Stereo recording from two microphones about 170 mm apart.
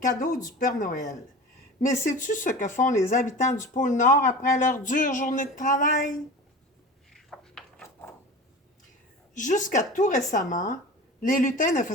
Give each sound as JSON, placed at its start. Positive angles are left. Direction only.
{"t": 0.0, "sound": "speech", "side_deg": 50}
{"t": 7.1, "sound": "a sound", "side_deg": 0}
{"t": 9.3, "sound": "speech", "side_deg": 50}